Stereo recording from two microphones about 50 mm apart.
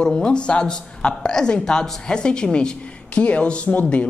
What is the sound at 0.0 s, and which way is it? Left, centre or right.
A woman's voice, centre.